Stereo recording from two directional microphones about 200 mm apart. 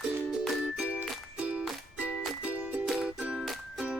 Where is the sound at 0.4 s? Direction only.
5° right (ahead or behind).